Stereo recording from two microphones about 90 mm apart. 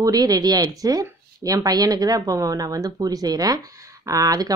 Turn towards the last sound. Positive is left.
turn(degrees=-40)  # may be behind; listen again after turning